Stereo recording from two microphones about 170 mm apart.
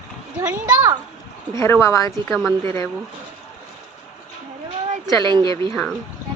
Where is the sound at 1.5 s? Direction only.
15° left (ahead or behind).